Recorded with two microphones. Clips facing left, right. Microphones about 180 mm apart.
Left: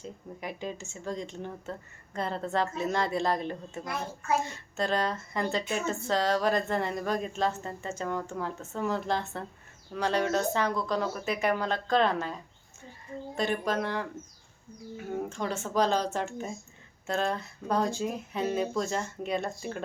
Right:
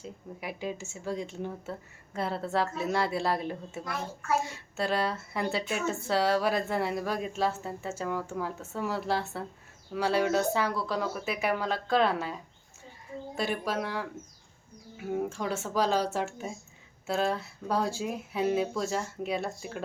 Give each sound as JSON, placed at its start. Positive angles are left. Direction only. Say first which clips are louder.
{"t": 0.0, "sound": "speech", "louder": "even", "side_deg": -5}